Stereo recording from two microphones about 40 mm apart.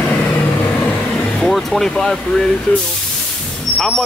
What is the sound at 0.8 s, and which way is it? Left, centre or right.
Vehicle, left.